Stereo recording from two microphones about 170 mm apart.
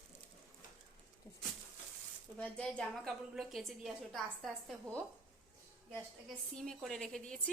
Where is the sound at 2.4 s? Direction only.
5° left (ahead or behind).